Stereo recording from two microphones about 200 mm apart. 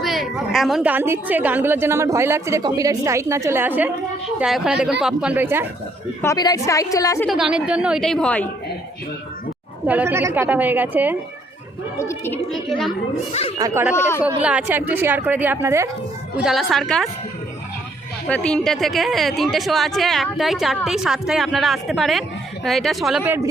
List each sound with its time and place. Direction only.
0.0 s a woman's voice: centre (ahead or behind)
6.2 s a woman's voice: 20° left (ahead or behind)
7.3 s a woman's voice: centre (ahead or behind)
9.8 s a woman's voice: 10° right (ahead or behind)
11.9 s a woman's voice: 15° left (ahead or behind)
13.6 s a woman's voice: 15° right (ahead or behind)
13.9 s a woman's voice: 10° left (ahead or behind)
14.4 s a woman's voice: 5° right (ahead or behind)
16.4 s a woman's voice: centre (ahead or behind)
18.3 s a woman's voice: 5° left (ahead or behind)